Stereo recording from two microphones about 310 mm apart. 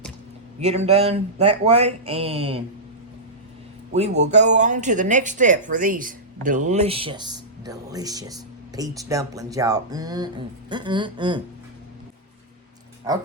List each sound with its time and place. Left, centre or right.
0.6 s speech: centre
3.9 s speech: right